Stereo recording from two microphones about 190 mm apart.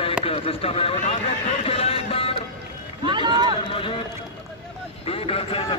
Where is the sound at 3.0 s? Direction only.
25° right (ahead or behind).